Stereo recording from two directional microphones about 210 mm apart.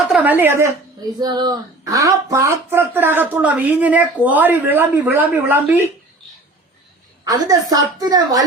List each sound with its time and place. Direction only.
0.1 s speech: 10° right (ahead or behind)
7.3 s speech: 15° right (ahead or behind)